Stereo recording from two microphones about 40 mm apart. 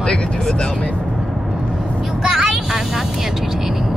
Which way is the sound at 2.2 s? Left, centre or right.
Centre.